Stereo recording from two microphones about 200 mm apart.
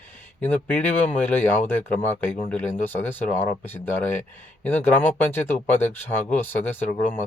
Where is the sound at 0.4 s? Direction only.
10° left (ahead or behind).